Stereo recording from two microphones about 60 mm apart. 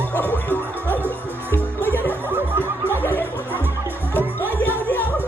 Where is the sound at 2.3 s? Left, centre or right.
Right.